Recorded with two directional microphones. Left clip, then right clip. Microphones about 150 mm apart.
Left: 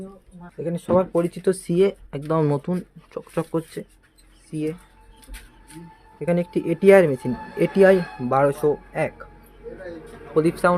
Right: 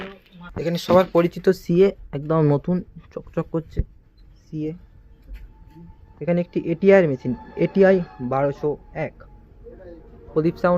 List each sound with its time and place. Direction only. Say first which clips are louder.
0.6 s speech: right 3 dB; 5° left (ahead or behind)
6.1 s speech: even; 20° left (ahead or behind)
10.3 s speech: left 1 dB; 15° left (ahead or behind)